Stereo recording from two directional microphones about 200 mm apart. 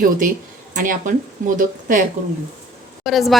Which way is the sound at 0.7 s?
40° right (ahead or behind).